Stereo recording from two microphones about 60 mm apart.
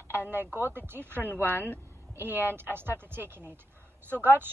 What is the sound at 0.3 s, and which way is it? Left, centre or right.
A woman's voice, right.